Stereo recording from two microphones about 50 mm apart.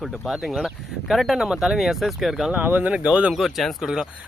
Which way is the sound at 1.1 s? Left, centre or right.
Centre.